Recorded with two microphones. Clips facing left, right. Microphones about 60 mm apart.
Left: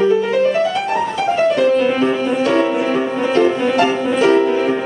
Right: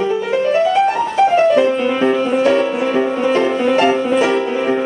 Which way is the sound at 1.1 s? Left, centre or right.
Right.